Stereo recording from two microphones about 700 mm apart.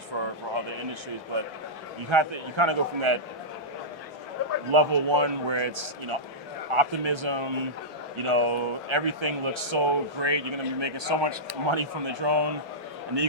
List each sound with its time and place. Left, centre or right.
0.1 s a sound: right
2.0 s speech: right
4.7 s speech: right